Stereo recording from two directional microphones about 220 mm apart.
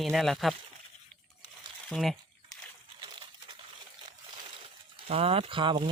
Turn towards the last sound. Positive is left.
turn(degrees=-20)  # may be behind; listen again after turning